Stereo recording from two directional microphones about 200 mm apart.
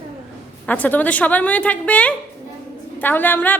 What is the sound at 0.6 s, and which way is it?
A woman's voice, 10° left (ahead or behind).